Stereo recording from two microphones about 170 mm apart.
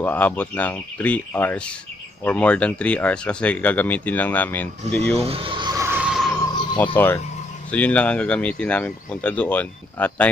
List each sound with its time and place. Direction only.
0.0 s speech: 10° left (ahead or behind)
5.2 s speech: 35° right (ahead or behind)
5.8 s vehicle: 10° right (ahead or behind)
6.8 s speech: 10° left (ahead or behind)